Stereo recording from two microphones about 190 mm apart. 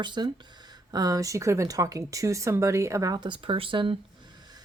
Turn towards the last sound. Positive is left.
turn(degrees=-25)  # may be behind; listen again after turning